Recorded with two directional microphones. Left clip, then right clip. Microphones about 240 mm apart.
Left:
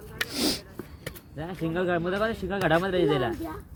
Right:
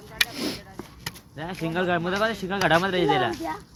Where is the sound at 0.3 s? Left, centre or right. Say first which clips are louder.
Left 3 dB; centre.